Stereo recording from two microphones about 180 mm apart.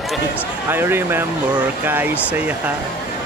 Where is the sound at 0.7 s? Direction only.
10° right (ahead or behind).